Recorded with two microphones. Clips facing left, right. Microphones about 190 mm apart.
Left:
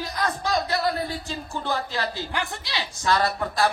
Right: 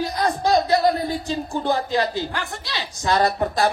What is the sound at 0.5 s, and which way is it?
Speech, 15° right (ahead or behind).